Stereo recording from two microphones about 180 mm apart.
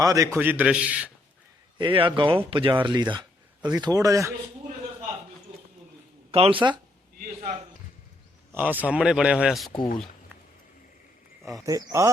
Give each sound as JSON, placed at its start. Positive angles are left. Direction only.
{"t": 0.0, "sound": "a man's voice", "side_deg": -20}
{"t": 1.8, "sound": "a man's voice", "side_deg": -25}
{"t": 6.3, "sound": "a man's voice", "side_deg": -30}
{"t": 8.5, "sound": "speech", "side_deg": -10}
{"t": 11.6, "sound": "a man's voice", "side_deg": -20}